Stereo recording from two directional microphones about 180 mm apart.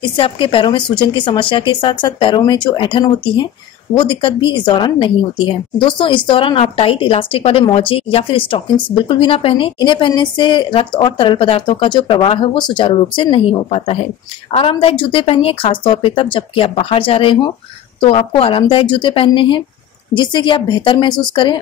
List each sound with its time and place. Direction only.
0.1 s a woman's voice: 30° left (ahead or behind)